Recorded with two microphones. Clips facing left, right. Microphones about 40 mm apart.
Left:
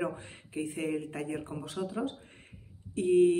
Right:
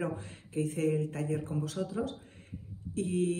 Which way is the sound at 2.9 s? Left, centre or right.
Left.